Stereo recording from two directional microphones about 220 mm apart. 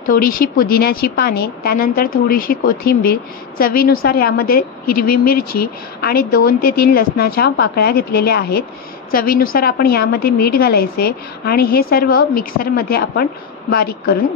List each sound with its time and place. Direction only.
0.0 s speech: 40° left (ahead or behind)